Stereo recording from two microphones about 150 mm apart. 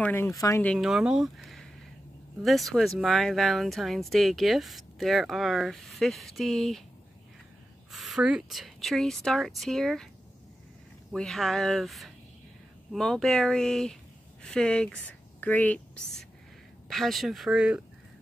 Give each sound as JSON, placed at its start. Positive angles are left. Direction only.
{"t": 0.0, "sound": "speech", "side_deg": 15}
{"t": 0.7, "sound": "speech", "side_deg": 0}
{"t": 7.9, "sound": "speech", "side_deg": 0}
{"t": 11.1, "sound": "speech", "side_deg": 5}